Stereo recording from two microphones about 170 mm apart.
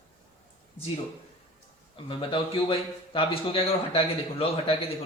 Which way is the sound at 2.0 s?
30° left (ahead or behind).